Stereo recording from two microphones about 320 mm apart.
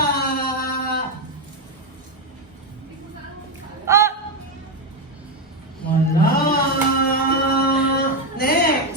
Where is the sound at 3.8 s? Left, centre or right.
Centre.